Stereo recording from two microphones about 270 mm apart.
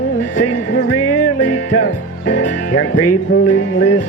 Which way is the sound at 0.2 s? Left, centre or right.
Left.